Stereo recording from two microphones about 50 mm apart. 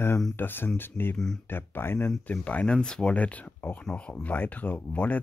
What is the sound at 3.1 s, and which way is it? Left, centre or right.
Speech, left.